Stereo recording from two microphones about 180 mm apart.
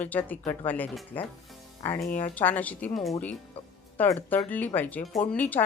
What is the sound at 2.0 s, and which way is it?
Speech, 50° left (ahead or behind).